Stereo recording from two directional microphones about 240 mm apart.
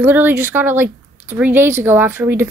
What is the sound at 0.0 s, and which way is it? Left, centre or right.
Speech, centre.